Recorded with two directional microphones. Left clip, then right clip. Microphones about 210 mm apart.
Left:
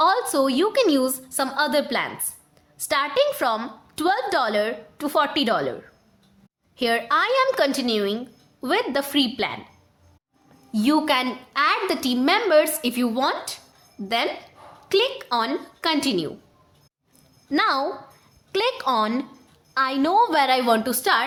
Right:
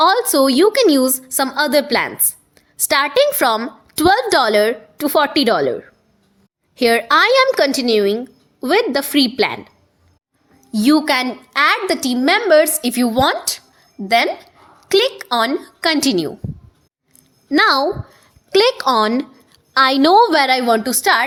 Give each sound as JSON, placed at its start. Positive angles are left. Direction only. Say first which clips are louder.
{"t": 0.0, "sound": "a woman's voice", "louder": "right 6 dB", "side_deg": -30}
{"t": 2.6, "sound": "a sound", "louder": "right 7 dB", "side_deg": -30}
{"t": 3.2, "sound": "a woman's voice", "louder": "right 6 dB", "side_deg": -30}
{"t": 6.7, "sound": "a woman's voice", "louder": "right 8 dB", "side_deg": -25}
{"t": 10.7, "sound": "a woman's voice", "louder": "right 6 dB", "side_deg": -25}
{"t": 11.3, "sound": "a woman's voice", "louder": "right 6 dB", "side_deg": -35}
{"t": 14.8, "sound": "a woman's voice", "louder": "right 6 dB", "side_deg": -30}
{"t": 17.5, "sound": "a woman's voice", "louder": "right 8 dB", "side_deg": -30}